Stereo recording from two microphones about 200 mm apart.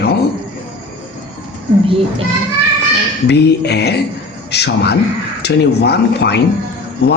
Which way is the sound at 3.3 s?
55° left (ahead or behind).